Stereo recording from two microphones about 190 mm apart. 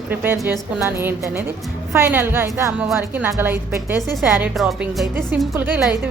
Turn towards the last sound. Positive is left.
turn(degrees=-5)  # may be behind; listen again after turning